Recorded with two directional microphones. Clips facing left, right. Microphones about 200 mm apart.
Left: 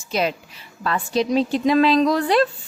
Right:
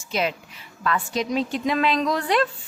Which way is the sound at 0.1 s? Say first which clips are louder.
Left 3 dB; 35° left (ahead or behind).